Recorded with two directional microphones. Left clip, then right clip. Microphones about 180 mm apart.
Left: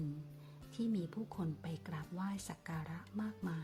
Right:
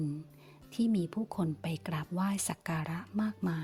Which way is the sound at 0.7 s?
40° right (ahead or behind).